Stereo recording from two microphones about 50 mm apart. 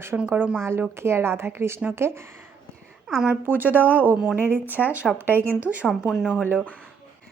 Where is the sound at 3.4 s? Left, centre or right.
Right.